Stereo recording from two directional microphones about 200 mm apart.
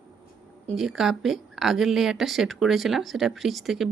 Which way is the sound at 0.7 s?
Centre (ahead or behind).